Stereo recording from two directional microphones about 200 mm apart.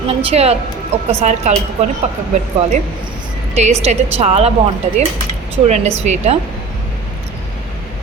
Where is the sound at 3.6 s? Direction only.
35° right (ahead or behind).